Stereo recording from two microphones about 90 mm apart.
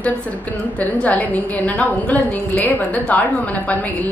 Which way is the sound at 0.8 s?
15° left (ahead or behind).